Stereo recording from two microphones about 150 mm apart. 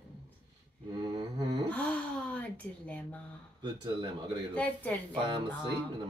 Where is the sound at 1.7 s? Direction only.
10° left (ahead or behind).